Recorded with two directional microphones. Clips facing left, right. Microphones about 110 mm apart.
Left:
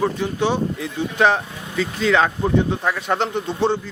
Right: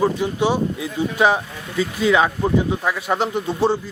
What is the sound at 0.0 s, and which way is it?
Speech, 10° right (ahead or behind).